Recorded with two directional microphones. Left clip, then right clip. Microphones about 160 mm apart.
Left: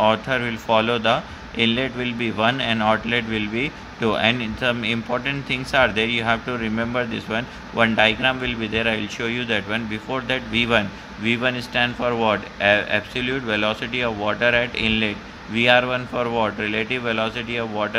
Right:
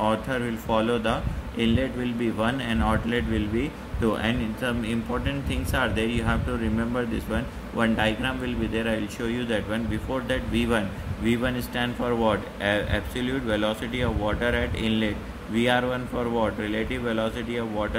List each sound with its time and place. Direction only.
0.0 s a man's voice: 40° left (ahead or behind)